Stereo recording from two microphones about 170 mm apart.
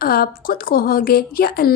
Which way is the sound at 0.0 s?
60° left (ahead or behind).